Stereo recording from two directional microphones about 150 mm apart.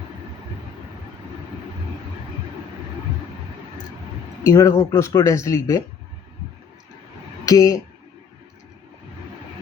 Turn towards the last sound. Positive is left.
turn(degrees=25)  # may be behind; listen again after turning